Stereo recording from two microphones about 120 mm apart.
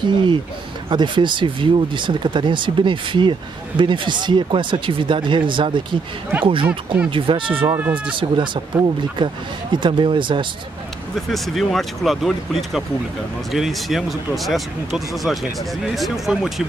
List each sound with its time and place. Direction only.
0.0 s speech: 40° right (ahead or behind)
7.6 s speech: 25° right (ahead or behind)
8.2 s speech: 45° right (ahead or behind)
11.1 s speech: centre (ahead or behind)